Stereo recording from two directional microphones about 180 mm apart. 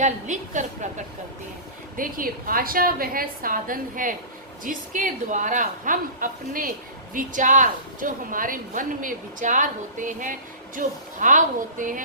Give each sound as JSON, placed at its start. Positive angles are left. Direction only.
{"t": 0.0, "sound": "a woman's voice", "side_deg": -40}
{"t": 2.0, "sound": "a woman's voice", "side_deg": -50}